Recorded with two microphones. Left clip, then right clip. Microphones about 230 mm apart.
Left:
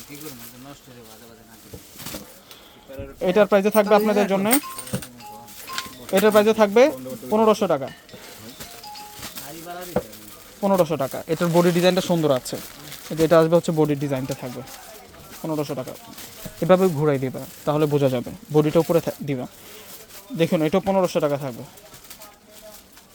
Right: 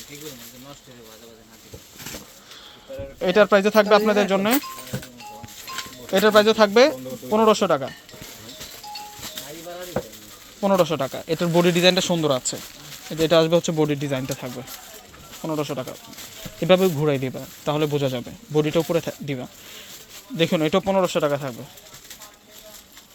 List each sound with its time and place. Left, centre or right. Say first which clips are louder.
3.2 s speech: right 1 dB; centre
6.1 s speech: right 1 dB; centre
10.0 s stir: left 3 dB; left
10.6 s speech: even; centre
20.3 s speech: even; centre